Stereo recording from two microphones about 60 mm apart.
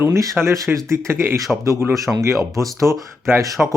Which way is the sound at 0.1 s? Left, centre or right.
Right.